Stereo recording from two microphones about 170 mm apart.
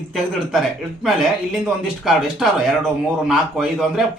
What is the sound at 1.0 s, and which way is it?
A man's voice, centre (ahead or behind).